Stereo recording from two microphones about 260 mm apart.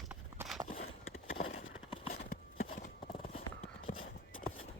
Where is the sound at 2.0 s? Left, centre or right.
Left.